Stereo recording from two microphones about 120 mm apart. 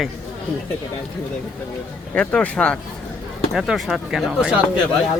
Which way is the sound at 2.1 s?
10° left (ahead or behind).